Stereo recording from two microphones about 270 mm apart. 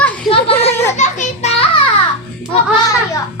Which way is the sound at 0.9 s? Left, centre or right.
Left.